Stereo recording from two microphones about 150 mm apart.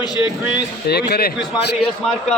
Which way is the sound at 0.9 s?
90° left.